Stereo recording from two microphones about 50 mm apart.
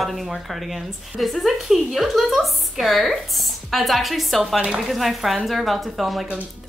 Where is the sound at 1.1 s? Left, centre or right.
Centre.